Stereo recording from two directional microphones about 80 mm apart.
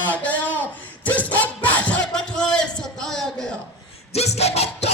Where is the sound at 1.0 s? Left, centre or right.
Left.